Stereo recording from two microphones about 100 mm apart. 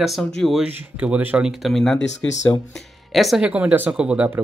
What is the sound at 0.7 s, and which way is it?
Speech, 20° right (ahead or behind).